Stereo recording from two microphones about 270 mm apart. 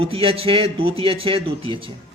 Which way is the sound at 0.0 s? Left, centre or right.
Centre.